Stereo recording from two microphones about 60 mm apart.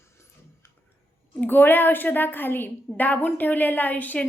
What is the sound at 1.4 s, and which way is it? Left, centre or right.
A woman's voice, left.